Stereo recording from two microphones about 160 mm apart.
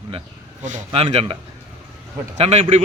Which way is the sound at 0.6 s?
50° right (ahead or behind).